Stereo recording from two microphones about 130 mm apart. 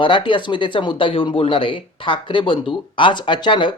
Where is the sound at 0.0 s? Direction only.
40° left (ahead or behind).